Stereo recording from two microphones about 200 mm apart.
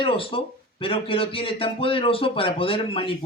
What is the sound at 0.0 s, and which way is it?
Speech, 25° left (ahead or behind).